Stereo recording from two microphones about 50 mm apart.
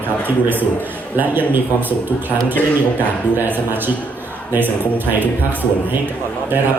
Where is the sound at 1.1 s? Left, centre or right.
Right.